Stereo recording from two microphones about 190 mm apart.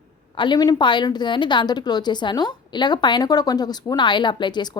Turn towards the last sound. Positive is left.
turn(degrees=20)  # may be behind; listen again after turning